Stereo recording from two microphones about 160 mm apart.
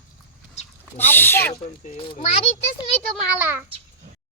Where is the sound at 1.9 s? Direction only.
35° left (ahead or behind).